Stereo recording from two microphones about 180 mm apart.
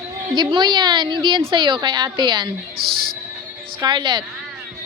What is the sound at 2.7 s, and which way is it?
Speech, 55° right (ahead or behind).